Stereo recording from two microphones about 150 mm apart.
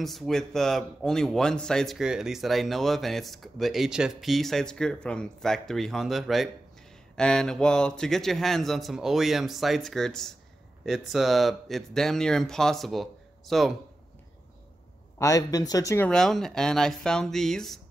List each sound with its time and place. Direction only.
0.0 s a man's voice: centre (ahead or behind)
15.1 s speech: 20° left (ahead or behind)
16.1 s a man's voice: 5° left (ahead or behind)